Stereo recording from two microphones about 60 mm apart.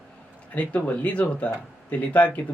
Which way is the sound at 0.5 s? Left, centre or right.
Left.